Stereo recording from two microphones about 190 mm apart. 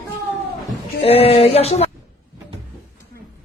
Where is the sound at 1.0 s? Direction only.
30° left (ahead or behind).